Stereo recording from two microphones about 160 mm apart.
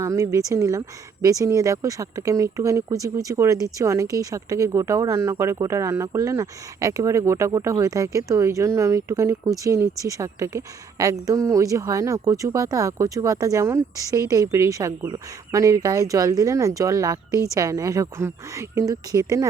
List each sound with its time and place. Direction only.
0.0 s speech: 20° right (ahead or behind)